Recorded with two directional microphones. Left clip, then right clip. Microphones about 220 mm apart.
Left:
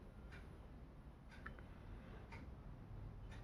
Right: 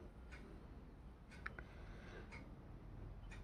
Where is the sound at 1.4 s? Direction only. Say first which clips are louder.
Right 5 dB; 45° right (ahead or behind).